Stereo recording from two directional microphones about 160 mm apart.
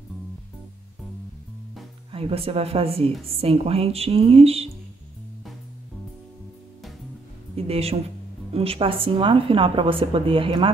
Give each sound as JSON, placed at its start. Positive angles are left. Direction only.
{"t": 2.1, "sound": "a woman's voice", "side_deg": -35}
{"t": 7.5, "sound": "a woman's voice", "side_deg": -40}